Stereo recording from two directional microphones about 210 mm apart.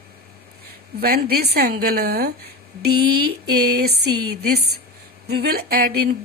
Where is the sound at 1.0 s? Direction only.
50° right (ahead or behind).